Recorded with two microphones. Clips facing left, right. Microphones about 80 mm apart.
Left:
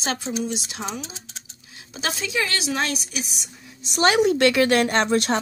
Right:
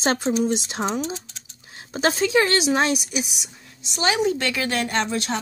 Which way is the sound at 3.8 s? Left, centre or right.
Left.